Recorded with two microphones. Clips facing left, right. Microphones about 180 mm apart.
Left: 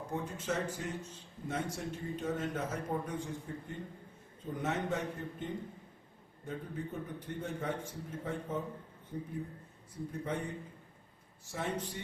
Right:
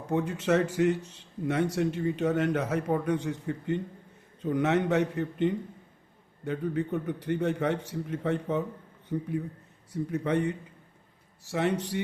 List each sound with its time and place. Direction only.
0.1 s a man's voice: 75° right (ahead or behind)